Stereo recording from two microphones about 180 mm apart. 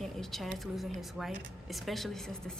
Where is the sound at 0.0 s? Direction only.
Centre (ahead or behind).